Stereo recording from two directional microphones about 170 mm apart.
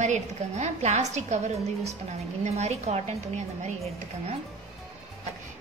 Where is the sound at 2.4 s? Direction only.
40° right (ahead or behind).